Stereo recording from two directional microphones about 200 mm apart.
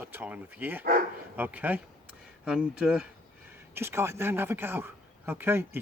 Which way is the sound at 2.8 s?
5° right (ahead or behind).